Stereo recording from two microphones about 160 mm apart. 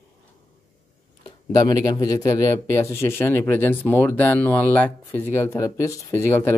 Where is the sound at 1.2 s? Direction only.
25° left (ahead or behind).